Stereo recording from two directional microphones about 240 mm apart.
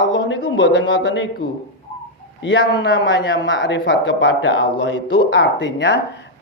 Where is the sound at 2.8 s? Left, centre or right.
Left.